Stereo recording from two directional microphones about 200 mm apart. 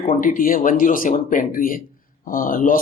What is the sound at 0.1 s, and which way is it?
Speech, 40° left (ahead or behind).